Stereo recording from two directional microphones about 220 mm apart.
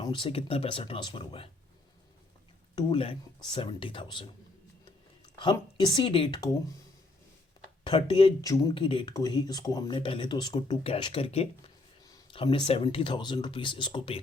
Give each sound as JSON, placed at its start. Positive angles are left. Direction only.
{"t": 0.0, "sound": "speech", "side_deg": 20}
{"t": 2.7, "sound": "speech", "side_deg": 25}
{"t": 7.9, "sound": "speech", "side_deg": 25}